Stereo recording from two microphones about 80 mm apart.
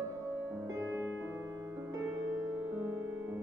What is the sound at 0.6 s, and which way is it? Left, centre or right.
Music, right.